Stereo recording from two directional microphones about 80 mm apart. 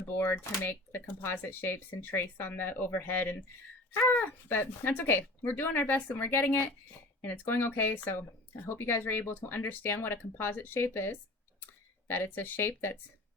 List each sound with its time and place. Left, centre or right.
0.2 s speech: left